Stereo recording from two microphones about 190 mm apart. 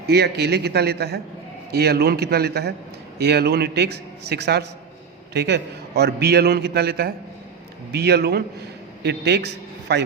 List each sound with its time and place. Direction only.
0.1 s a man's voice: 60° right (ahead or behind)